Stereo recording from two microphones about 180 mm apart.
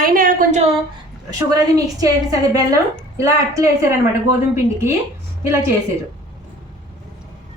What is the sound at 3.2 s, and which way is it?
Speech, 15° right (ahead or behind).